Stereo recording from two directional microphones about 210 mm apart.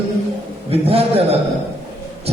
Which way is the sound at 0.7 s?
30° right (ahead or behind).